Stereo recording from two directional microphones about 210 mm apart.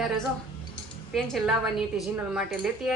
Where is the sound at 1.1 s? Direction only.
Centre (ahead or behind).